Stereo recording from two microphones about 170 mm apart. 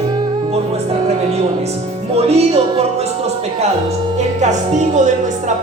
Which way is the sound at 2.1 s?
40° right (ahead or behind).